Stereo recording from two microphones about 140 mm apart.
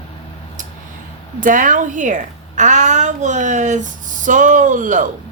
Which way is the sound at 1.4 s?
70° right (ahead or behind).